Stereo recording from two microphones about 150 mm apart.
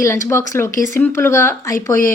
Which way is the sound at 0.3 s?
15° left (ahead or behind).